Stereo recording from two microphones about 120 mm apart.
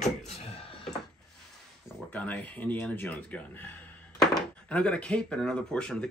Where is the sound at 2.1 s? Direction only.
15° left (ahead or behind).